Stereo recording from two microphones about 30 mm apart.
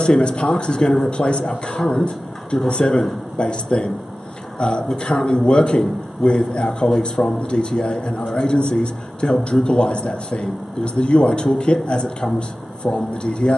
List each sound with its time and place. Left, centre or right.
0.0 s a man's voice: left
1.8 s a man's voice: left